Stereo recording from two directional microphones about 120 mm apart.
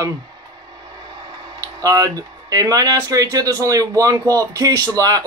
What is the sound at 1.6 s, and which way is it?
Speech, 30° right (ahead or behind).